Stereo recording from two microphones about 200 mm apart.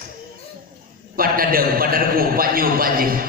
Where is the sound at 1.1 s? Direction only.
45° right (ahead or behind).